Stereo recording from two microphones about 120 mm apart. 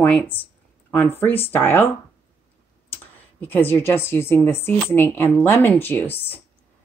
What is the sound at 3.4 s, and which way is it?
Speech, 15° left (ahead or behind).